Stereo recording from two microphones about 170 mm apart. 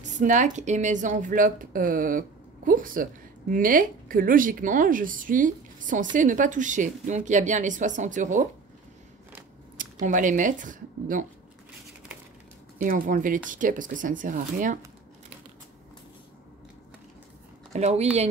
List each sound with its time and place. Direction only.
0.0 s speech: 45° right (ahead or behind)
9.8 s speech: 50° right (ahead or behind)
12.7 s speech: 55° right (ahead or behind)
17.7 s speech: 40° right (ahead or behind)